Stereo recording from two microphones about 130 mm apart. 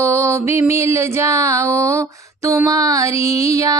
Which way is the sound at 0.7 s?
20° right (ahead or behind).